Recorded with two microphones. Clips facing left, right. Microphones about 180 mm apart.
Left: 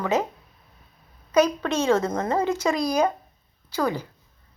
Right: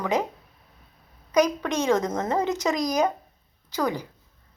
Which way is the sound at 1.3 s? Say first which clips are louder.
Left 1 dB; 15° right (ahead or behind).